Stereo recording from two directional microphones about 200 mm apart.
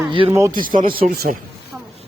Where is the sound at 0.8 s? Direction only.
45° right (ahead or behind).